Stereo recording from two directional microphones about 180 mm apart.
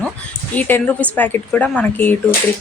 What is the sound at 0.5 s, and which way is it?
Speech, 10° left (ahead or behind).